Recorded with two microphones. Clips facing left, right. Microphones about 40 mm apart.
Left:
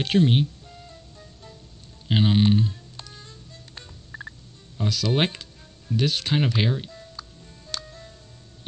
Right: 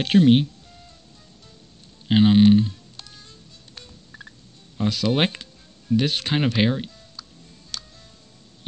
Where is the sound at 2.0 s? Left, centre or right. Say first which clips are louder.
Right 6 dB; centre.